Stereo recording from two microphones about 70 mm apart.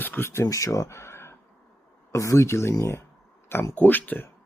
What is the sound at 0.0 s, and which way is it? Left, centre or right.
Speech, left.